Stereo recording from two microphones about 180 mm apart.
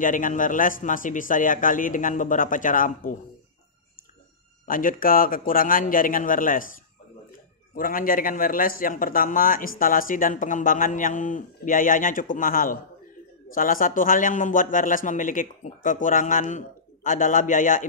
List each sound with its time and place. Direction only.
0.0 s a man's voice: 45° left (ahead or behind)
4.6 s a man's voice: 50° left (ahead or behind)